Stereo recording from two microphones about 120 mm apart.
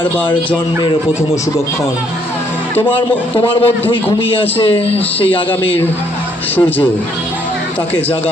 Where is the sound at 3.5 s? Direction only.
45° left (ahead or behind).